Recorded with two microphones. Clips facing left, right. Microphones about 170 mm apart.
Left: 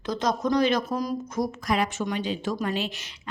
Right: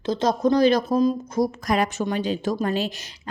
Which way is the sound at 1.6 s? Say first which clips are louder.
Right 3 dB; 45° right (ahead or behind).